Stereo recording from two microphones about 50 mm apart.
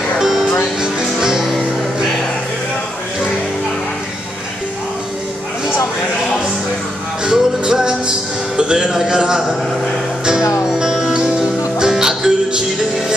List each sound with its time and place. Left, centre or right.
0.2 s music: centre
7.2 s music: centre
8.5 s speech: centre
10.2 s music: centre